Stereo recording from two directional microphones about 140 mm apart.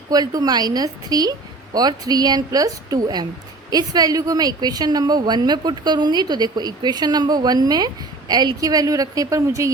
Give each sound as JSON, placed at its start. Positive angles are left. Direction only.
{"t": 0.1, "sound": "a woman's voice", "side_deg": -25}